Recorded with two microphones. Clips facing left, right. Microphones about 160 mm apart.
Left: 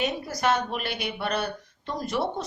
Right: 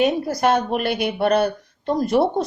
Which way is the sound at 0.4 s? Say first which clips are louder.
Right 6 dB; 50° right (ahead or behind).